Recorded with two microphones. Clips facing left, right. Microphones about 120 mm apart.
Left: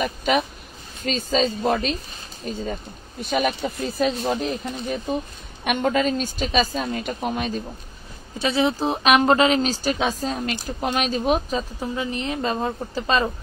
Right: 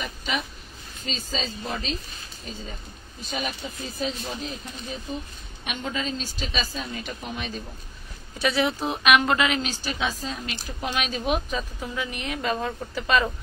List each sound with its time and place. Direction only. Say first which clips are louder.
0.0 s a woman's voice: left 9 dB; 50° left (ahead or behind)
8.4 s speech: left 3 dB; 25° left (ahead or behind)